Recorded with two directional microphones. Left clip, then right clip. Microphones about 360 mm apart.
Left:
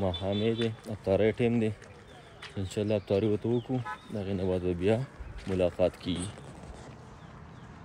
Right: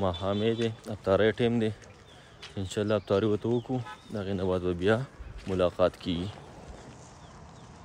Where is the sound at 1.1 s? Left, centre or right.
Right.